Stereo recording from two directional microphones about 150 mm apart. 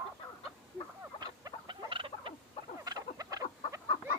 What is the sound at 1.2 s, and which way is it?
Rodents, 30° right (ahead or behind).